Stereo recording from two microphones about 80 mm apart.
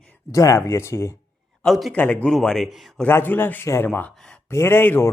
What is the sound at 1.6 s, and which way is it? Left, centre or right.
Speech, centre.